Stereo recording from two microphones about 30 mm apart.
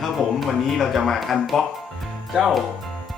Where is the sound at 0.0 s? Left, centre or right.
Centre.